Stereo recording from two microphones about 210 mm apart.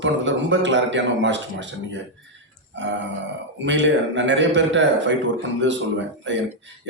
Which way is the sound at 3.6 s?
60° right (ahead or behind).